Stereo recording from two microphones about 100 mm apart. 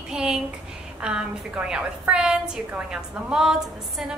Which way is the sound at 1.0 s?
10° right (ahead or behind).